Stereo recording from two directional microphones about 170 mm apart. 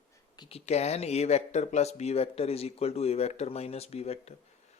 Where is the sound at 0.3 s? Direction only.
35° left (ahead or behind).